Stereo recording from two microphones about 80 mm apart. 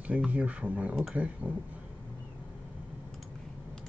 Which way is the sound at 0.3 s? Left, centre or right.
Centre.